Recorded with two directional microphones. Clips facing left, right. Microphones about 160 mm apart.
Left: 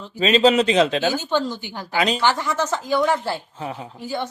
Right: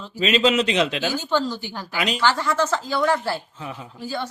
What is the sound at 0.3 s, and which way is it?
Speech, 35° left (ahead or behind).